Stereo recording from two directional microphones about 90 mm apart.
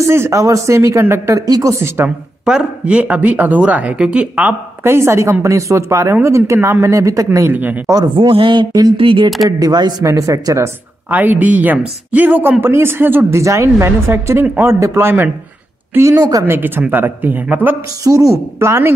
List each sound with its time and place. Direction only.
0.0 s speech: 30° right (ahead or behind)
1.4 s speech: 40° right (ahead or behind)
2.0 s speech: 10° right (ahead or behind)
4.8 s speech: 30° right (ahead or behind)
7.4 s speech: 20° right (ahead or behind)
8.0 s speech: 65° right (ahead or behind)
9.6 s speech: 50° right (ahead or behind)
10.0 s speech: 40° right (ahead or behind)
11.1 s speech: 20° right (ahead or behind)
13.4 s speech: 35° right (ahead or behind)
16.4 s speech: 25° right (ahead or behind)
18.0 s speech: 40° right (ahead or behind)